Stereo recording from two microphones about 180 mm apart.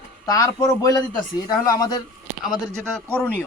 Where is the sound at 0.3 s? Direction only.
20° left (ahead or behind).